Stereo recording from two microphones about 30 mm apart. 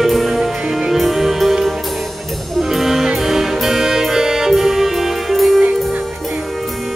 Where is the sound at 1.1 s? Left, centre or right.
Centre.